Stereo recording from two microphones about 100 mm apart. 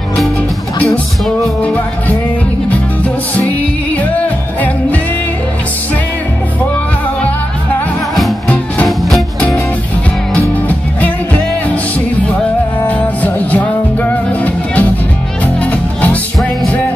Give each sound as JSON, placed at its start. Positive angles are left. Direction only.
{"t": 1.6, "sound": "music", "side_deg": 15}
{"t": 8.8, "sound": "music", "side_deg": 0}
{"t": 10.3, "sound": "music", "side_deg": 15}
{"t": 12.8, "sound": "music", "side_deg": 15}